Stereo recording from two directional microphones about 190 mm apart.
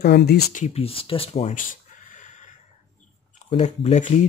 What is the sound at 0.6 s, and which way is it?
Speech, 30° left (ahead or behind).